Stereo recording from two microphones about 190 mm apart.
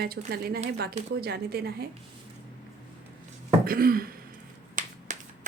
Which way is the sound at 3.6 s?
50° right (ahead or behind).